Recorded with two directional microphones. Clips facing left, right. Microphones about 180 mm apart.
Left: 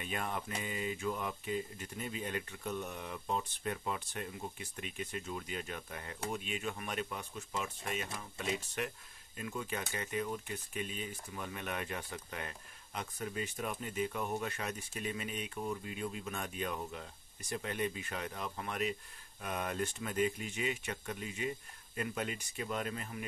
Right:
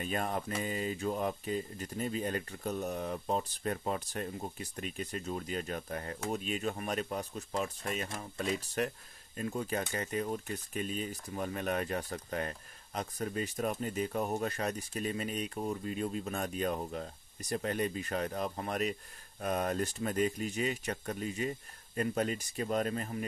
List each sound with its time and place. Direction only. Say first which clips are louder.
0.0 s speech: right 5 dB; 40° right (ahead or behind)